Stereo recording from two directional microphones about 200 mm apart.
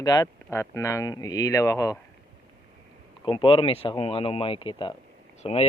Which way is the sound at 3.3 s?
25° left (ahead or behind).